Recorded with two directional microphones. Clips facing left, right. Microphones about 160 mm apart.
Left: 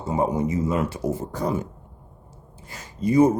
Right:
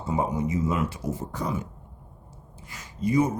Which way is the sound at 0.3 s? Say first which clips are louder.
Left 3 dB; 40° left (ahead or behind).